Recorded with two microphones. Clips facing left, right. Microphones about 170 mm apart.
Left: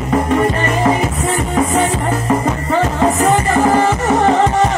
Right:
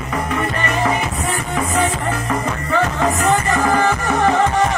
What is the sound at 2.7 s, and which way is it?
Music, 30° left (ahead or behind).